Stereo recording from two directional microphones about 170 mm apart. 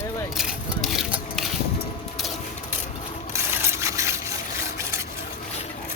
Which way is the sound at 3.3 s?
15° right (ahead or behind).